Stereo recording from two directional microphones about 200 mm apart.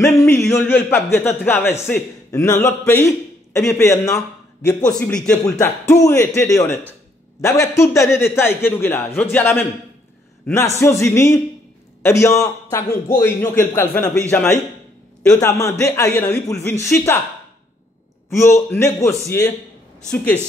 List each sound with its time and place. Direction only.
0.0 s a sound: 15° left (ahead or behind)
0.7 s a man's voice: 10° left (ahead or behind)
18.3 s a man's voice: 15° left (ahead or behind)